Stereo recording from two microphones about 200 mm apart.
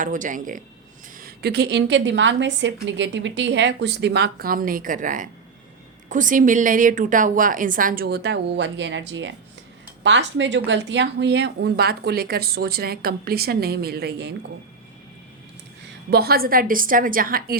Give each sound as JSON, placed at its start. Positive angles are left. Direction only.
{"t": 0.0, "sound": "speech", "side_deg": -40}
{"t": 1.2, "sound": "speech", "side_deg": -55}
{"t": 16.0, "sound": "speech", "side_deg": -50}